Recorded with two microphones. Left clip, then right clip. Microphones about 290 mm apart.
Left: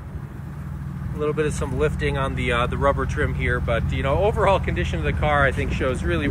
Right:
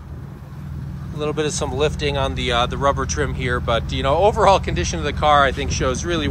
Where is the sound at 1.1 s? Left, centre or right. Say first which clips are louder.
Right 1 dB; centre.